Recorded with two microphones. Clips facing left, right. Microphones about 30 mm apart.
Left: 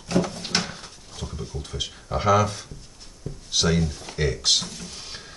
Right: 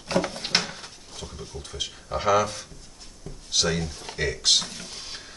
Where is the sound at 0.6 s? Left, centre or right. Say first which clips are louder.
Even; centre.